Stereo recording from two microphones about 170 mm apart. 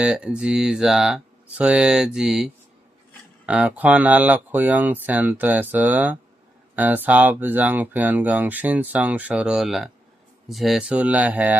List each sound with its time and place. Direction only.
0.0 s speech: 5° right (ahead or behind)